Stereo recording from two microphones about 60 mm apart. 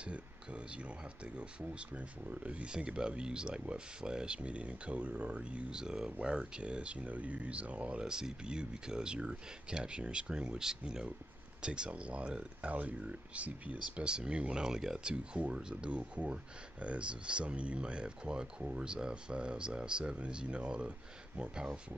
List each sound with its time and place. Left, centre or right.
0.0 s speech: centre